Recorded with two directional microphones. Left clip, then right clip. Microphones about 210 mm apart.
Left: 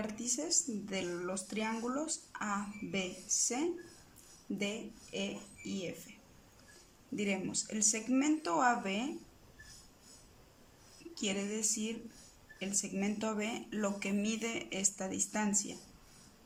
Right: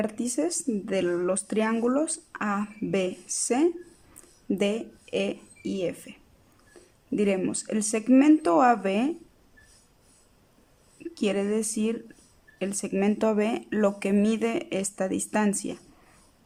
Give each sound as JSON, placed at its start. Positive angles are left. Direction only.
{"t": 0.0, "sound": "speech", "side_deg": -40}
{"t": 7.2, "sound": "speech", "side_deg": -40}
{"t": 11.1, "sound": "speech", "side_deg": -35}